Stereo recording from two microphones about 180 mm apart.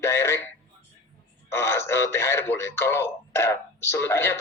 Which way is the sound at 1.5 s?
15° left (ahead or behind).